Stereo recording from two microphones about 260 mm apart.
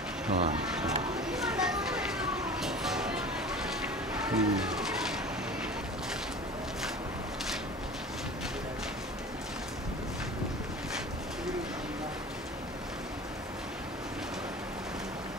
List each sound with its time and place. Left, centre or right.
0.3 s speech: right
0.7 s speech: centre
1.3 s music: centre